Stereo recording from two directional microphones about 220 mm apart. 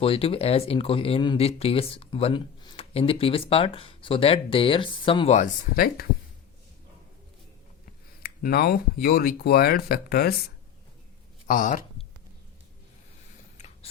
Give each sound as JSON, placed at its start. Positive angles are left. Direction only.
{"t": 0.0, "sound": "speech", "side_deg": 25}
{"t": 8.2, "sound": "speech", "side_deg": 45}
{"t": 11.4, "sound": "speech", "side_deg": 35}